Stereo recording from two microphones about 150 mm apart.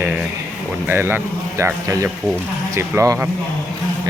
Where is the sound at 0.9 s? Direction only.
15° right (ahead or behind).